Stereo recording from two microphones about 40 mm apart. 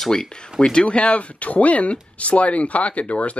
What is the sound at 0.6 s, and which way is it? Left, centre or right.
Speech, left.